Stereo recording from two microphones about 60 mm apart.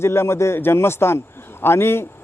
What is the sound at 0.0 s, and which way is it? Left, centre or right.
A man's voice, left.